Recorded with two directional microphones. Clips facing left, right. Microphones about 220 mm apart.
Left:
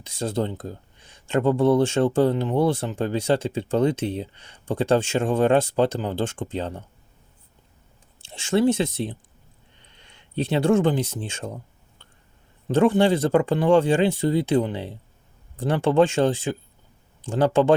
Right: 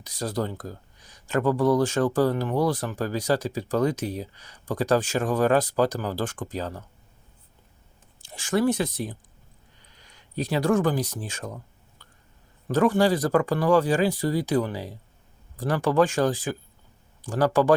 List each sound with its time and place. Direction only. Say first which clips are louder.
0.0 s speech: left 3 dB; 25° left (ahead or behind)
8.2 s speech: left 3 dB; 25° left (ahead or behind)
12.0 s a sound: left 1 dB; 25° left (ahead or behind)
12.6 s speech: left 2 dB; 25° left (ahead or behind)